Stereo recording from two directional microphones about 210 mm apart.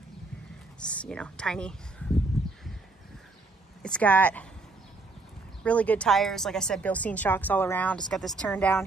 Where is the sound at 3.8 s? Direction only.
5° left (ahead or behind).